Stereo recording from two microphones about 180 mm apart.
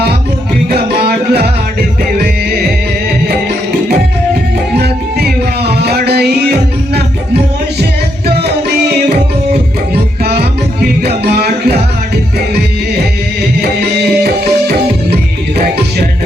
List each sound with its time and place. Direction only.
0.7 s music: 60° right (ahead or behind)
4.8 s music: 65° right (ahead or behind)
11.0 s music: 65° right (ahead or behind)